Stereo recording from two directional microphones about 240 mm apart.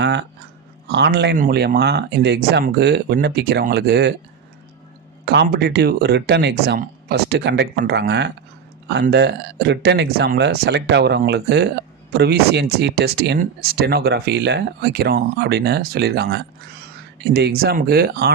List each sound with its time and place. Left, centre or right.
0.0 s a sound: right
0.9 s speech: right
5.2 s speech: right